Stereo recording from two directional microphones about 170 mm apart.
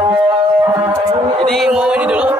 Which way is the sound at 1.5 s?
Centre (ahead or behind).